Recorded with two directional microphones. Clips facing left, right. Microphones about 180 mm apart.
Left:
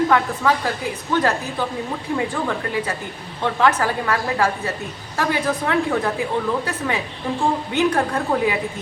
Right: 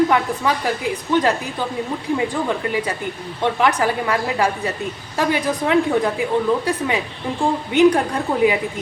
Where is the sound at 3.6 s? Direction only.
15° right (ahead or behind).